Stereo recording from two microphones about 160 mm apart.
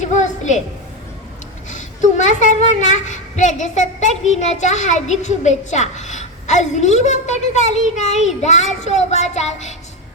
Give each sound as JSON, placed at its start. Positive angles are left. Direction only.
{"t": 0.0, "sound": "a woman's voice", "side_deg": 50}
{"t": 1.7, "sound": "a woman's voice", "side_deg": 50}